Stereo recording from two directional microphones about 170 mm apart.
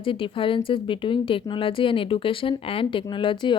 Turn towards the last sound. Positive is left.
turn(degrees=30)  # may be behind; listen again after turning